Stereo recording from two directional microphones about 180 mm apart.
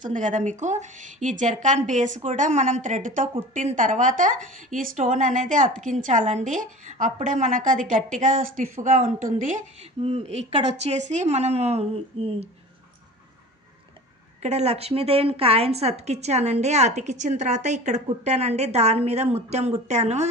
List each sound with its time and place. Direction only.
0.0 s speech: 45° right (ahead or behind)
10.0 s a woman's voice: 35° right (ahead or behind)
14.4 s a woman's voice: 35° right (ahead or behind)